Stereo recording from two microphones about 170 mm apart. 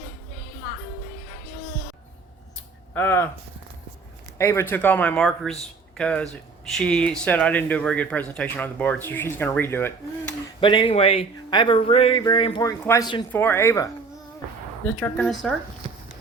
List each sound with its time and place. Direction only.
2.9 s speech: 10° left (ahead or behind)
4.4 s speech: 15° left (ahead or behind)
10.6 s speech: 30° left (ahead or behind)
13.3 s speech: 10° left (ahead or behind)
14.9 s speech: 5° left (ahead or behind)